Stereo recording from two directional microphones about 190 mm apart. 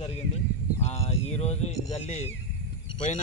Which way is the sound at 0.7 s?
35° left (ahead or behind).